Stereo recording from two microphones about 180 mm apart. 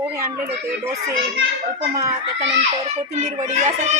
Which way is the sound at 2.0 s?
20° right (ahead or behind).